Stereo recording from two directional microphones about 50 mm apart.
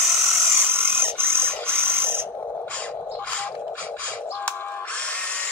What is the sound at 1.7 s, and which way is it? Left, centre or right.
Electric toothbrush, right.